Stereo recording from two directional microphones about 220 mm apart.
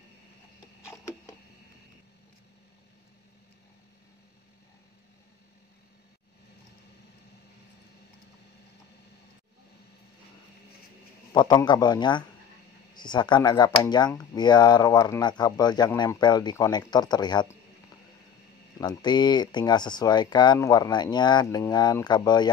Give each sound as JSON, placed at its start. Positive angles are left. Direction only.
{"t": 0.8, "sound": "a sound", "side_deg": 15}
{"t": 11.3, "sound": "speech", "side_deg": 20}
{"t": 18.8, "sound": "speech", "side_deg": 20}